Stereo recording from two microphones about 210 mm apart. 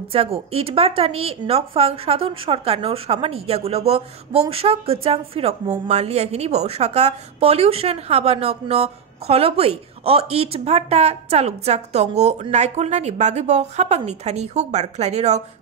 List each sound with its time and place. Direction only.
0.1 s speech: 30° right (ahead or behind)